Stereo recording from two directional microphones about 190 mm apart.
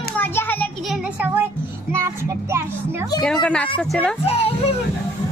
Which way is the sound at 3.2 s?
5° left (ahead or behind).